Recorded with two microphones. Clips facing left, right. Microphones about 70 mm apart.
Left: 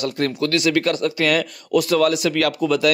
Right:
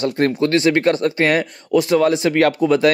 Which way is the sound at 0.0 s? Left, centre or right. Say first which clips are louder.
Right 4 dB; right.